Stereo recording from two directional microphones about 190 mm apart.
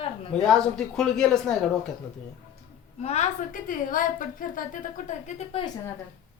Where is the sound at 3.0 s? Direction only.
35° left (ahead or behind).